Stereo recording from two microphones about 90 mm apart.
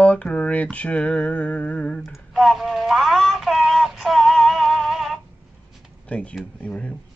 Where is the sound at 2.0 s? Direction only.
Centre (ahead or behind).